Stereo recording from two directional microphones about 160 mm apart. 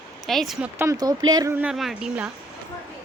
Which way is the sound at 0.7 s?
20° right (ahead or behind).